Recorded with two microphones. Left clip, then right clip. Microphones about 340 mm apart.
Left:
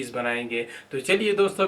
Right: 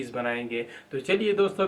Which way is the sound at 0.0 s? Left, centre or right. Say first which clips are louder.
Left 2 dB; centre.